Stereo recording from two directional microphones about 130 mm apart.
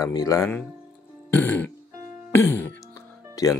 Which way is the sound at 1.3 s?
15° left (ahead or behind).